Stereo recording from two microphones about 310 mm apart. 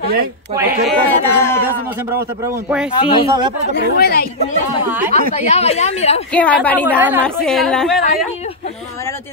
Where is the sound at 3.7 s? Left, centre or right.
Left.